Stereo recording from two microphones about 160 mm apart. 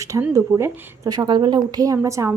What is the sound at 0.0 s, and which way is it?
Speech, 20° right (ahead or behind).